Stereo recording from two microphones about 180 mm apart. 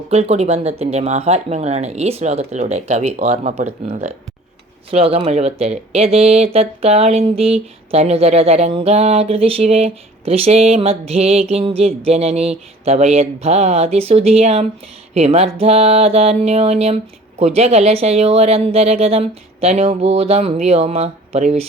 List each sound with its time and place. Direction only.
0.1 s speech: 35° right (ahead or behind)